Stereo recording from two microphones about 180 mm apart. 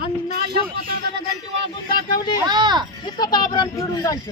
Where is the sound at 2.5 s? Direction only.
25° right (ahead or behind).